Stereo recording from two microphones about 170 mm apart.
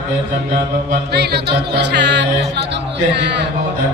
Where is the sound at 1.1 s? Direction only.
70° right (ahead or behind); by 3.4 s 90° right.